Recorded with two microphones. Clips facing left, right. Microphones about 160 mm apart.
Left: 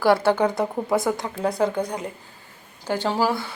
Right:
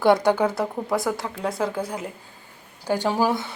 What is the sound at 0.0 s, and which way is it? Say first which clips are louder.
A woman's voice: even; 20° right (ahead or behind).